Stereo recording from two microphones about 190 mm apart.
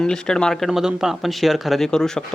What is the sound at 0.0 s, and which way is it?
Speech, 5° left (ahead or behind).